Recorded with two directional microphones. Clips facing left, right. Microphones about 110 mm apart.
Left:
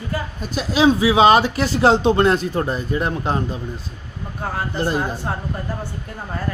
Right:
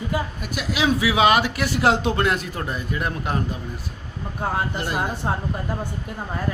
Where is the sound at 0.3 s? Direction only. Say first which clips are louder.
Left 6 dB; 30° left (ahead or behind).